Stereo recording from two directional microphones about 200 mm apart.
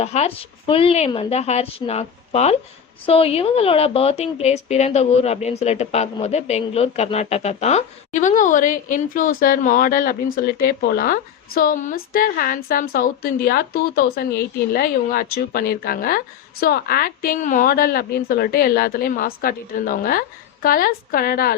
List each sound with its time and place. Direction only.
0.0 s a woman's voice: 30° left (ahead or behind); by 21.5 s 50° left (ahead or behind)